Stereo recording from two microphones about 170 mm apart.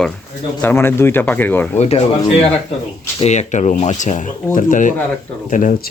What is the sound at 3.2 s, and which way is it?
Speech, 40° left (ahead or behind).